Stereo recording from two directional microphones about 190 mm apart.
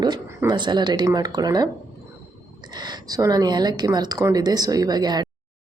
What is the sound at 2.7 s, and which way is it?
Speech, 20° right (ahead or behind).